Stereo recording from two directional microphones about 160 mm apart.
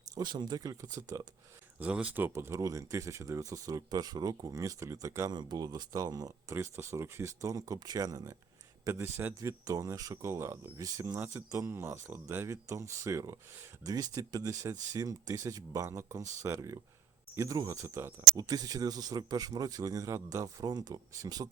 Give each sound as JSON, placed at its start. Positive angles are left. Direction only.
{"t": 0.2, "sound": "speech", "side_deg": -25}
{"t": 1.8, "sound": "speech", "side_deg": -5}